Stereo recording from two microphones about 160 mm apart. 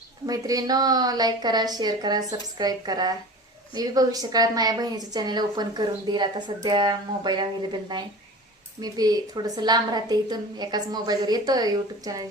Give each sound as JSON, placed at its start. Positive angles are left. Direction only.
{"t": 0.3, "sound": "a woman's voice", "side_deg": -20}